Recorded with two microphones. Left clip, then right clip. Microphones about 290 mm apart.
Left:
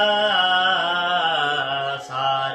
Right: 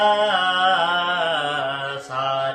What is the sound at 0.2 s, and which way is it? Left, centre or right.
Music, centre.